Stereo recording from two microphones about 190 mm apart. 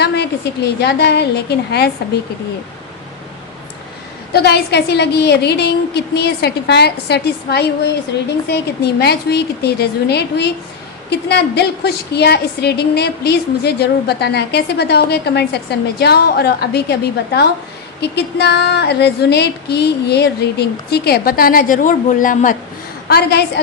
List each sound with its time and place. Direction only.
0.0 s a woman's voice: 60° left (ahead or behind)
4.3 s a woman's voice: 60° left (ahead or behind); by 22.5 s 45° left (ahead or behind)
23.0 s a woman's voice: 55° left (ahead or behind)